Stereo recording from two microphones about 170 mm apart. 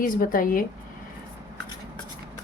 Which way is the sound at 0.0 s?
55° left (ahead or behind).